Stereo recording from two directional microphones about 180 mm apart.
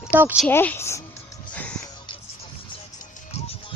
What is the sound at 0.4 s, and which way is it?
Speech, 10° left (ahead or behind).